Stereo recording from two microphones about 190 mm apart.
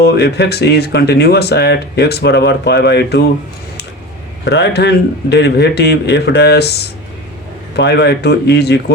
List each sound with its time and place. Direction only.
0.0 s speech: 60° left (ahead or behind)
4.4 s speech: 65° left (ahead or behind)